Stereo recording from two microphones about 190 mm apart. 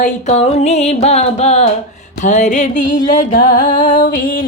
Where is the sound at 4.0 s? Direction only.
50° left (ahead or behind).